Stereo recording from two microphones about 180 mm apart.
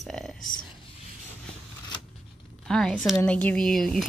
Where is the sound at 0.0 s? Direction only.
Centre (ahead or behind).